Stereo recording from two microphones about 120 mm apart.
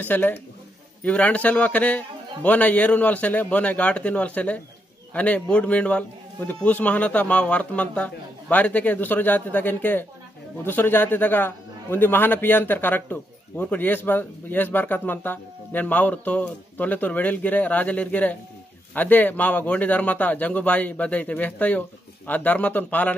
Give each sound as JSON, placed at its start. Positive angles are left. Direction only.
{"t": 0.0, "sound": "a man's voice", "side_deg": 15}